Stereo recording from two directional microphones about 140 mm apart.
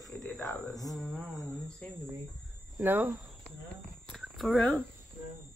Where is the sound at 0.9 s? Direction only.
Centre (ahead or behind).